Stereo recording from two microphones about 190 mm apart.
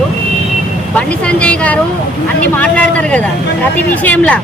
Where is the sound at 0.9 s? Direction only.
5° left (ahead or behind).